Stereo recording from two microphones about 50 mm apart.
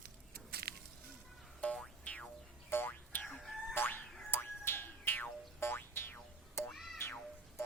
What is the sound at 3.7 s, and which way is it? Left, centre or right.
Boing, left.